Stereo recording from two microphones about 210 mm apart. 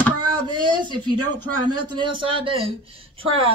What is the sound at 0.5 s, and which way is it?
Speech, 20° right (ahead or behind).